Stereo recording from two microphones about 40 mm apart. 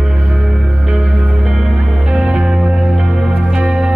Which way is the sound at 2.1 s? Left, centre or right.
Centre.